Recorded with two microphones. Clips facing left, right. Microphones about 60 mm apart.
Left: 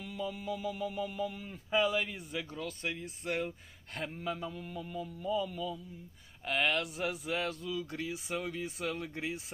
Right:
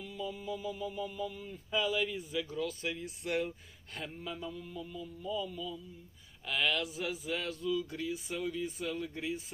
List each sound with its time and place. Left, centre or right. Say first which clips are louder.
0.0 s music: left 1 dB; left
1.5 s speech: left 3 dB; left
6.4 s speech: left 2 dB; left
6.8 s speech: left 1 dB; left